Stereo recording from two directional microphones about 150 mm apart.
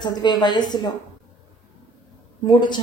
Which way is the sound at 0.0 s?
30° left (ahead or behind).